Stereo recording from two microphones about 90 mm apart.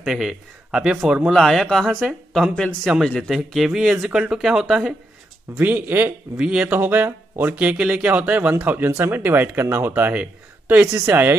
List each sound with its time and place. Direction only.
0.0 s a man's voice: 5° right (ahead or behind)
5.6 s speech: 20° right (ahead or behind)
6.3 s speech: 10° right (ahead or behind)
6.7 s speech: 20° right (ahead or behind)